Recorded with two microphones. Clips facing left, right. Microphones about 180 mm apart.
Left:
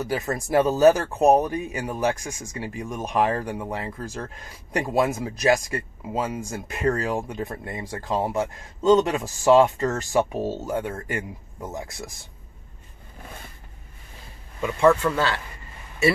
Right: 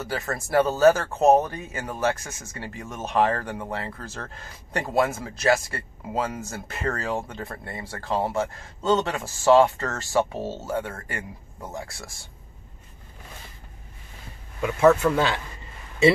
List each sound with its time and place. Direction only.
0.0 s speech: 15° left (ahead or behind)
14.6 s speech: 5° right (ahead or behind)